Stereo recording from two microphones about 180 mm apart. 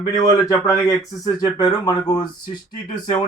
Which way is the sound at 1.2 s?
20° left (ahead or behind).